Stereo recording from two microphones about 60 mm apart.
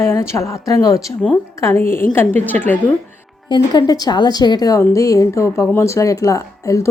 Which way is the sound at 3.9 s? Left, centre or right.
Left.